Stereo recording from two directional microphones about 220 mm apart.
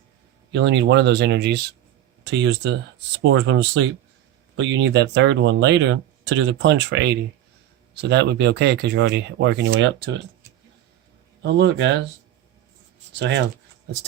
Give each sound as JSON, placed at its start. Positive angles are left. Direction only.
{"t": 0.5, "sound": "speech", "side_deg": -50}
{"t": 11.4, "sound": "speech", "side_deg": -50}
{"t": 13.1, "sound": "speech", "side_deg": -50}